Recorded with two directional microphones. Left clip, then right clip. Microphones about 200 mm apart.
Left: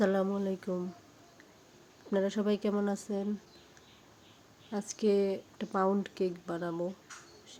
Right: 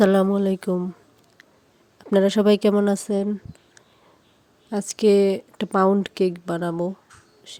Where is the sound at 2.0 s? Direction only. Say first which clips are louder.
Right 13 dB; 50° right (ahead or behind).